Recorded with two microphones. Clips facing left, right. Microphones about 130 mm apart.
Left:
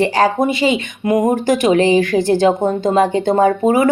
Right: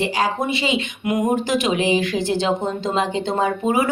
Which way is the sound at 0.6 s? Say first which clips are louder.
Left 6 dB; 35° left (ahead or behind).